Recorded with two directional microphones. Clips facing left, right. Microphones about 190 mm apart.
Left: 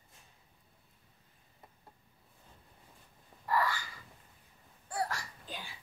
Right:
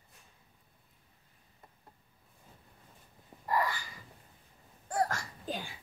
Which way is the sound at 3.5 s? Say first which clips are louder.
Even; 15° right (ahead or behind).